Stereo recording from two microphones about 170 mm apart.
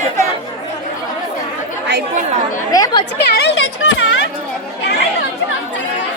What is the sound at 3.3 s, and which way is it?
Speech, 85° left.